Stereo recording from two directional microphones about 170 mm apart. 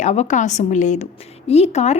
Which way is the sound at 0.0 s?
45° left (ahead or behind).